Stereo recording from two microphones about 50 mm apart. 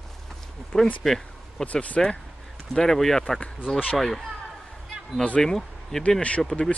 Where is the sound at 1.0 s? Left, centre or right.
Centre.